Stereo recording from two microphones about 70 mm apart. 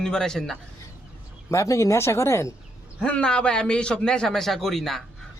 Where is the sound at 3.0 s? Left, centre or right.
Centre.